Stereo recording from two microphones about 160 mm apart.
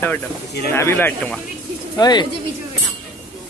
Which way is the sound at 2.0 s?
25° left (ahead or behind).